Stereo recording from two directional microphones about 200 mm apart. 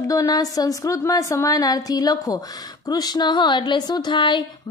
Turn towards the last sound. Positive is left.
turn(degrees=25)  # may be behind; listen again after turning